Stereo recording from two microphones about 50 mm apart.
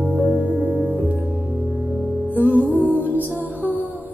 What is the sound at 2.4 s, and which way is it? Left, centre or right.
Music, right.